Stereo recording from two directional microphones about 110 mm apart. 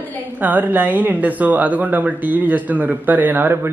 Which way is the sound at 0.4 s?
15° right (ahead or behind).